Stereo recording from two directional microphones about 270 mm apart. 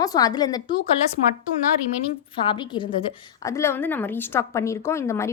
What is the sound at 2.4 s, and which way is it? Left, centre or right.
A woman's voice, centre.